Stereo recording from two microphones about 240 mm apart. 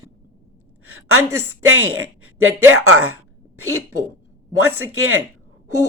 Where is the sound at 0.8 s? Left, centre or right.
Right.